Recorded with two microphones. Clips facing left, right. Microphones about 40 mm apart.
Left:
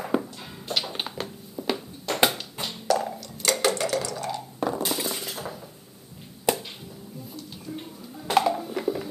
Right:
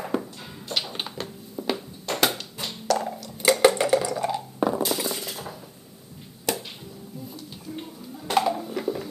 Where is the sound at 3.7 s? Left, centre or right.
Centre.